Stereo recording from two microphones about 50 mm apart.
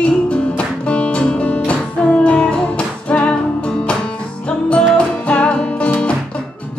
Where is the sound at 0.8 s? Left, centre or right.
Left.